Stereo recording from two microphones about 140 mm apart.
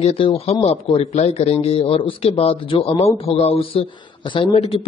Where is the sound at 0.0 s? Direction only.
45° left (ahead or behind).